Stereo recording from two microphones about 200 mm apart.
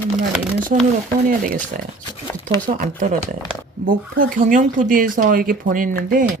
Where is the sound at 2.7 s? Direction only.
40° right (ahead or behind).